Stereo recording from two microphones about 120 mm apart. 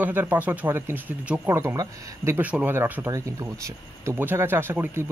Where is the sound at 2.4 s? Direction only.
10° right (ahead or behind).